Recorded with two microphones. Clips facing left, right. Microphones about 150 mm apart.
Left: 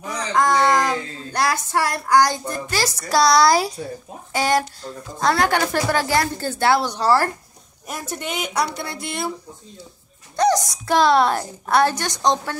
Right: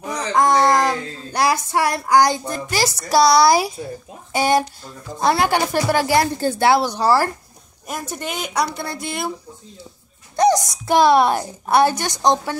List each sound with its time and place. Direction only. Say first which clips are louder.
0.4 s a sound: right 2 dB; 10° right (ahead or behind)
1.4 s a woman's voice: right 3 dB; 15° right (ahead or behind)
10.3 s a woman's voice: right 2 dB; 15° right (ahead or behind)